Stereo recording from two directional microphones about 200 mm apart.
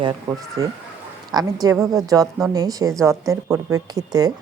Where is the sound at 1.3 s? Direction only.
20° right (ahead or behind).